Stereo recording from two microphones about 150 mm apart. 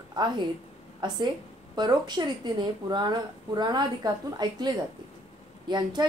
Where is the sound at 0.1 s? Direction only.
30° right (ahead or behind).